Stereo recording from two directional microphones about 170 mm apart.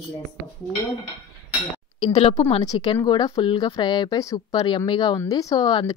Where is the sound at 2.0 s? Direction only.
35° left (ahead or behind).